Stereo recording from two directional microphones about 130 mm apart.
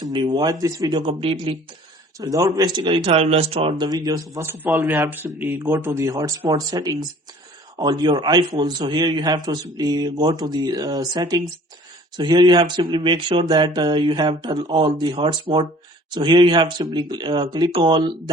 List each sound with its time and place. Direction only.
0.0 s a man's voice: 40° right (ahead or behind)
0.9 s speech: 40° right (ahead or behind)
2.1 s a man's voice: 25° right (ahead or behind); by 3.8 s 45° right (ahead or behind)
3.8 s a man's voice: 30° right (ahead or behind)